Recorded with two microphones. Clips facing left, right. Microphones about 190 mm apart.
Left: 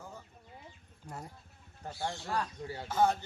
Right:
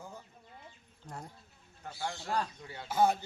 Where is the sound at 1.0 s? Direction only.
5° left (ahead or behind).